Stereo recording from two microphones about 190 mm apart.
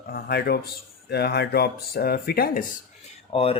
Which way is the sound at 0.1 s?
55° left (ahead or behind).